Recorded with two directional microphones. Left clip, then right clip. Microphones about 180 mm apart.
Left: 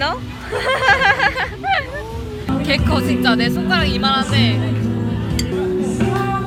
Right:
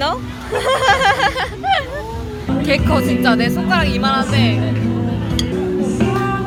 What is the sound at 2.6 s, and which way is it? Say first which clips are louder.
Speech: right 3 dB; 10° right (ahead or behind).